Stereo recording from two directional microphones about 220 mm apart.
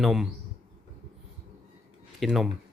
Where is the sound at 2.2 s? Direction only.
Centre (ahead or behind).